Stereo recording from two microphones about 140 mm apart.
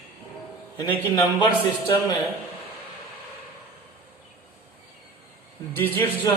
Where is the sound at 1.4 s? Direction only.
30° left (ahead or behind).